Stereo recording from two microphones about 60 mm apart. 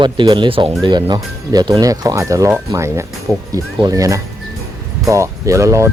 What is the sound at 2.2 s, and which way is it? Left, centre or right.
Speech, right.